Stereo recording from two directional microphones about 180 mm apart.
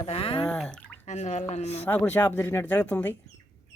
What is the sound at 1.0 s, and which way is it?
Speech, 40° left (ahead or behind).